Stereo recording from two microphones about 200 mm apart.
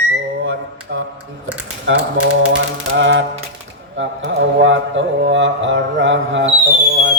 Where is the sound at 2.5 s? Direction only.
65° right (ahead or behind).